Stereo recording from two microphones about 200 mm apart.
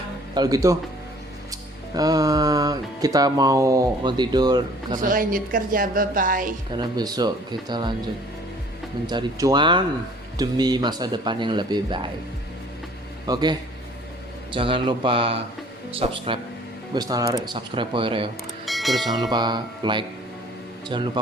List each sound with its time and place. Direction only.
0.3 s speech: 20° right (ahead or behind)
2.0 s speech: 20° right (ahead or behind)
4.9 s a woman's voice: 45° right (ahead or behind)
6.7 s speech: 20° right (ahead or behind)
9.0 s speech: 20° right (ahead or behind)
13.2 s speech: 20° right (ahead or behind)
18.6 s mechanisms: centre (ahead or behind)
19.3 s speech: 20° right (ahead or behind)